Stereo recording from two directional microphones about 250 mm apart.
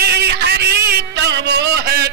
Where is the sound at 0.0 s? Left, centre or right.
Right.